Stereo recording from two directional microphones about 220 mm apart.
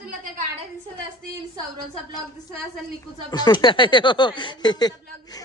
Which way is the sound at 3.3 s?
20° left (ahead or behind).